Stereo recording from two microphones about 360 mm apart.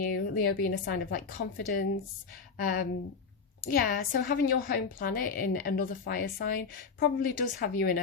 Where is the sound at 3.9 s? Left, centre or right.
Left.